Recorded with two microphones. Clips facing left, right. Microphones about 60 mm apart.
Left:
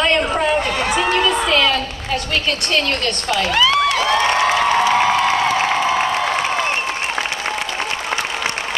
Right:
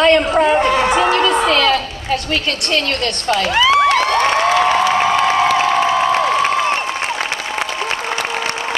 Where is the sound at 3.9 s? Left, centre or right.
Right.